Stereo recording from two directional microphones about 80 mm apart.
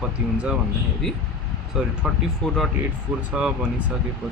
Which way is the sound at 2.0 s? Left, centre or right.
Centre.